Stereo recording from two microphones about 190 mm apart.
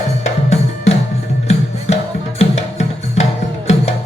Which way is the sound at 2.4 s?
35° left (ahead or behind).